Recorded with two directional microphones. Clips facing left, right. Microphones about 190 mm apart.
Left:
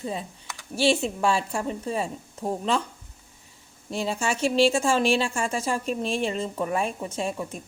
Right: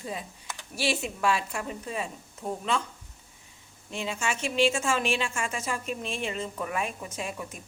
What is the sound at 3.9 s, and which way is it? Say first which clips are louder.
A woman's voice: left 5 dB; 35° left (ahead or behind).